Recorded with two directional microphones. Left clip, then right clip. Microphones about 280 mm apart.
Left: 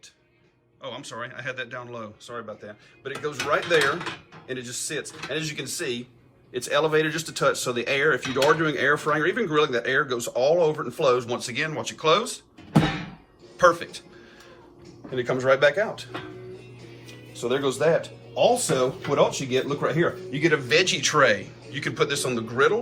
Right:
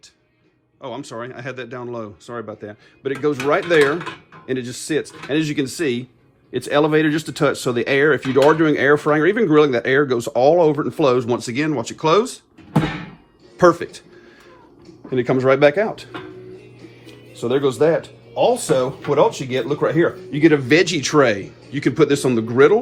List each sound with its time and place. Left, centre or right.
0.8 s speech: centre
12.7 s a sound: centre
13.6 s speech: right
15.1 s speech: right
17.3 s speech: right